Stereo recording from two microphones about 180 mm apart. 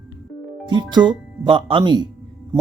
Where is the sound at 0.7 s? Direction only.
25° right (ahead or behind).